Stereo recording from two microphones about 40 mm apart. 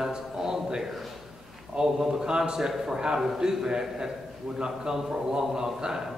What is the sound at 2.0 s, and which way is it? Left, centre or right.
Speech, centre.